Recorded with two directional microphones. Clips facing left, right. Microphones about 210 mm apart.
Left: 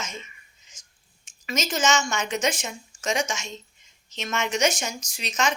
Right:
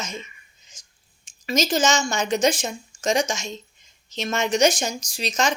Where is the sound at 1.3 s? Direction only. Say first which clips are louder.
Right 6 dB; 35° right (ahead or behind).